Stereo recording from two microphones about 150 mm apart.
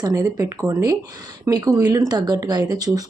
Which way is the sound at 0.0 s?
20° right (ahead or behind).